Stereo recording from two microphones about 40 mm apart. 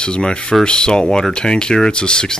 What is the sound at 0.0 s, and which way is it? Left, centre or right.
Speech, left.